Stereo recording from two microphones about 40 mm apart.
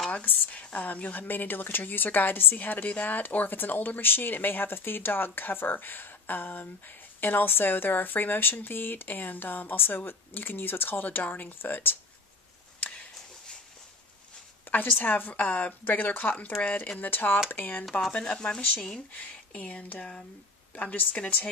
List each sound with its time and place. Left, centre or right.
0.5 s speech: left
1.2 s speech: left
2.5 s speech: left
12.8 s a sound: left
15.0 s speech: left
18.1 s speech: left
19.1 s speech: left
20.7 s speech: left